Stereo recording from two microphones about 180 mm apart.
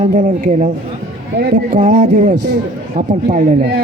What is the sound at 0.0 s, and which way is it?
Speech, 40° right (ahead or behind).